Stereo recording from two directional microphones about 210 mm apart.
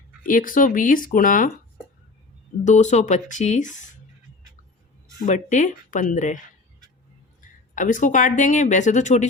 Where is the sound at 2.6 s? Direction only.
35° left (ahead or behind).